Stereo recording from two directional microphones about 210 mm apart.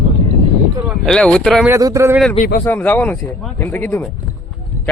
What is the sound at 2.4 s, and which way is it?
Speech, 45° left (ahead or behind).